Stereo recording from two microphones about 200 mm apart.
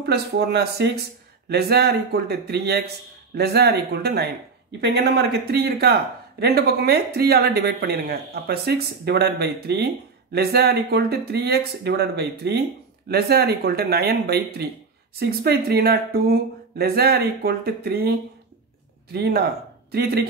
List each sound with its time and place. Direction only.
0.0 s speech: 55° right (ahead or behind)
19.1 s speech: 55° right (ahead or behind)